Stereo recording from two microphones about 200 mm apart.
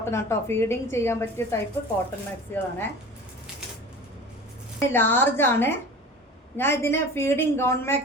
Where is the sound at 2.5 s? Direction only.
10° left (ahead or behind).